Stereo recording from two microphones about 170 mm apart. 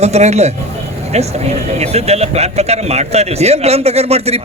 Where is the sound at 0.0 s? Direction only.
40° right (ahead or behind).